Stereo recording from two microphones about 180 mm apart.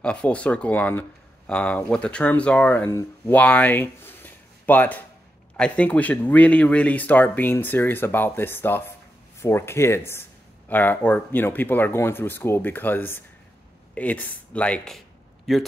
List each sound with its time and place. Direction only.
0.0 s speech: 5° left (ahead or behind)